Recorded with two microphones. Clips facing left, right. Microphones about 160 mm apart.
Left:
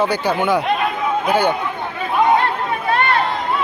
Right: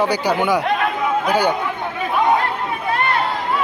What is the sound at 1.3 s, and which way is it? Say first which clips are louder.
Speech: left 2 dB; 15° right (ahead or behind).